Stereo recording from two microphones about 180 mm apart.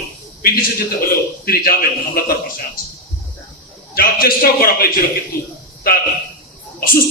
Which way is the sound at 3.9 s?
55° left (ahead or behind).